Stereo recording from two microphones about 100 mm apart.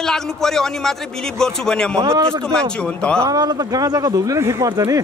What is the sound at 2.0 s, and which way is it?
Speech, 30° right (ahead or behind).